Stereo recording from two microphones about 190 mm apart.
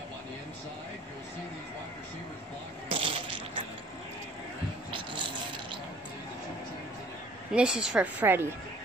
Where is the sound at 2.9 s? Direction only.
30° right (ahead or behind).